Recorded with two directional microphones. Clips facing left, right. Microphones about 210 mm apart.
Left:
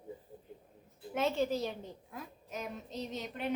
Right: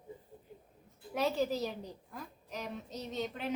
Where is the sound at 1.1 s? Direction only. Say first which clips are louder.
Even; centre (ahead or behind).